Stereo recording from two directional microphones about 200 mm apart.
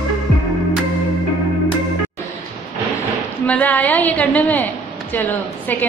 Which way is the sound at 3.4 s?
10° left (ahead or behind).